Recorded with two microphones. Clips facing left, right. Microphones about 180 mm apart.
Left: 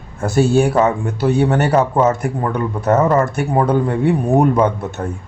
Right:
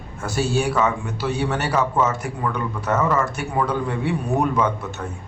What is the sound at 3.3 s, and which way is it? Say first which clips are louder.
Speech: left 7 dB; 50° left (ahead or behind).